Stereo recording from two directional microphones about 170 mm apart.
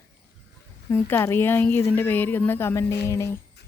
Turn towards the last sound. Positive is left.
turn(degrees=15)  # may be behind; listen again after turning